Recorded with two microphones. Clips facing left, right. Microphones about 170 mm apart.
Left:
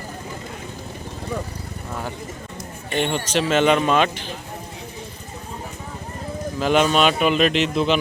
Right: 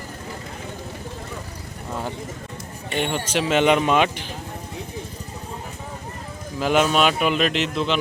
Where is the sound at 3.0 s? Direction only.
10° right (ahead or behind).